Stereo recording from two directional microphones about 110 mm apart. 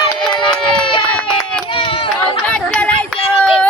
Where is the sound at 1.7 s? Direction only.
55° left (ahead or behind).